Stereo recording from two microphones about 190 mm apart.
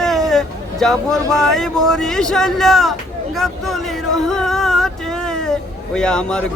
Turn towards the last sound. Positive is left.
turn(degrees=5)  # may be behind; listen again after turning